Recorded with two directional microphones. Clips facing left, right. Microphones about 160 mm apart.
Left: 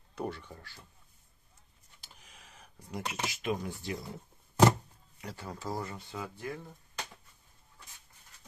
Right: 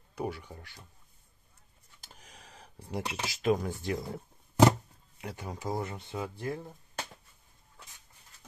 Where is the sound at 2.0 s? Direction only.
40° right (ahead or behind).